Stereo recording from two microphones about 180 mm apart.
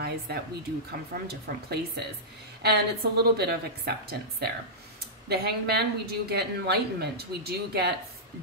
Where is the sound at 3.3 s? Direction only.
60° right (ahead or behind).